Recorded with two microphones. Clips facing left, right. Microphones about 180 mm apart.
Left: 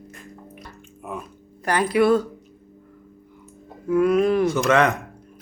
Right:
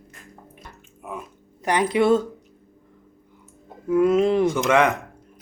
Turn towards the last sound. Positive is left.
turn(degrees=-15)  # may be behind; listen again after turning